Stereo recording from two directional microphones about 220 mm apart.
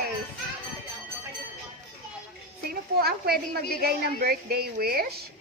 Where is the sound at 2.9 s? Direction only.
45° right (ahead or behind).